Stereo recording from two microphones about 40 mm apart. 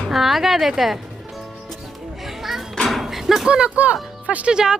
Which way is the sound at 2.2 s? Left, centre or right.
Centre.